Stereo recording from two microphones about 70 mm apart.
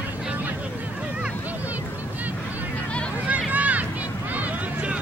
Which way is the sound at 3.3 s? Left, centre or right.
Right.